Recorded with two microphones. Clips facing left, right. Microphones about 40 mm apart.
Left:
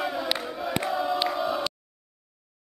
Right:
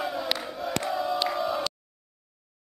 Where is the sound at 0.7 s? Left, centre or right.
Centre.